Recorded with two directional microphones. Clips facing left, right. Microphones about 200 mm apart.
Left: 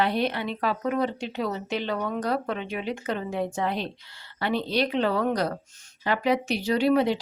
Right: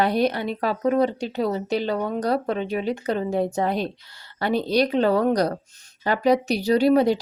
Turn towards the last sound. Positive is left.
turn(degrees=-40)  # may be behind; listen again after turning